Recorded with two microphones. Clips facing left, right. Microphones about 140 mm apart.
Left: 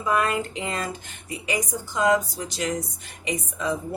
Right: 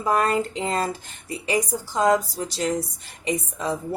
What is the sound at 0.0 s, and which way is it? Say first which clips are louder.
A woman's voice: right 2 dB; 40° right (ahead or behind).